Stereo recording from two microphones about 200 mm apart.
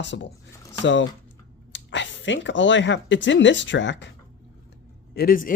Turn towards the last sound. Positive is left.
turn(degrees=45)  # may be behind; listen again after turning